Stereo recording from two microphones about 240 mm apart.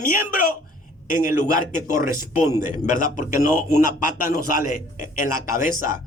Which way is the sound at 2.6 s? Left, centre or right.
Left.